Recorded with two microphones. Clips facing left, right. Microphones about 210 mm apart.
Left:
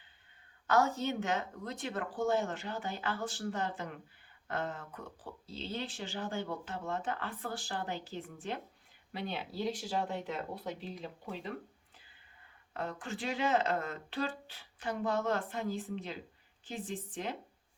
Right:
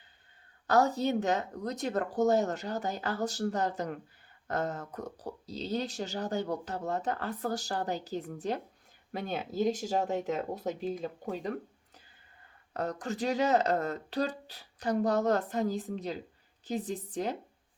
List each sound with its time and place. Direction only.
0.7 s speech: 35° right (ahead or behind)
12.7 s speech: 40° right (ahead or behind)